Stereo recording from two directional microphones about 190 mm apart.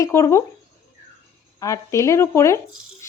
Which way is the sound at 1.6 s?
15° left (ahead or behind).